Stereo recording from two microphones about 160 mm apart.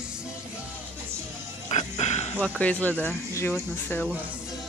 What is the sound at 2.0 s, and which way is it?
Snake, 45° left (ahead or behind).